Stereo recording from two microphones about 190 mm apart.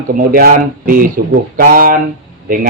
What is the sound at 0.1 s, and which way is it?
A man's voice, 50° right (ahead or behind).